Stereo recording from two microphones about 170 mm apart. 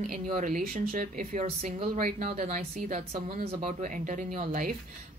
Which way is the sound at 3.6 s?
45° right (ahead or behind).